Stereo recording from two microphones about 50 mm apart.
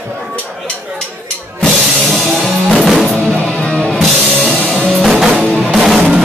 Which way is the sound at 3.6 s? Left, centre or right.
Centre.